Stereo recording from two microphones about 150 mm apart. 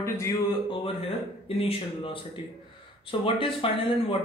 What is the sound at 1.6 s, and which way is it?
Speech, 40° left (ahead or behind).